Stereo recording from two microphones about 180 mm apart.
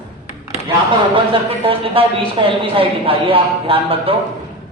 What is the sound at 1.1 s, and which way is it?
A man's voice, 30° right (ahead or behind).